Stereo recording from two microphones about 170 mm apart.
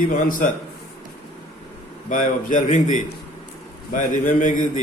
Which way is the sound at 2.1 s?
50° left (ahead or behind).